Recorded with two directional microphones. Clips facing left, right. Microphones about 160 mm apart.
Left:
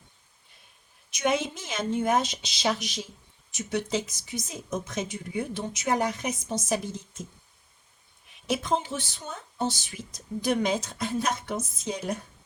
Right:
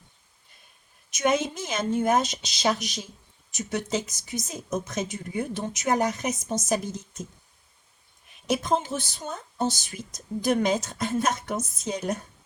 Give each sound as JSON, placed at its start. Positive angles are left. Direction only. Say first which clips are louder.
{"t": 1.1, "sound": "speech", "louder": "right 2 dB", "side_deg": -45}
{"t": 8.4, "sound": "speech", "louder": "right 2 dB", "side_deg": -40}